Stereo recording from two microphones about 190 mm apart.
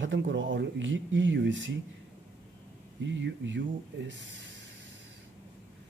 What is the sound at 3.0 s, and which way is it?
A man's voice, 75° right (ahead or behind).